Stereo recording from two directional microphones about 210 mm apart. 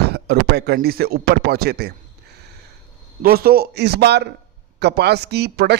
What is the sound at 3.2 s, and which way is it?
Speech, 45° right (ahead or behind).